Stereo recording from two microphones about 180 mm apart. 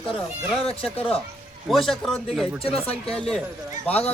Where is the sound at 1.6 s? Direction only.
Centre (ahead or behind).